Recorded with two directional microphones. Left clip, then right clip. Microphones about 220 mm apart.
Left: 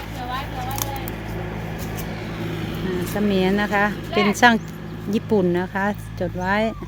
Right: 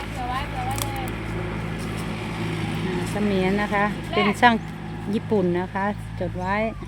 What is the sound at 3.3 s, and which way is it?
Speech, 15° left (ahead or behind).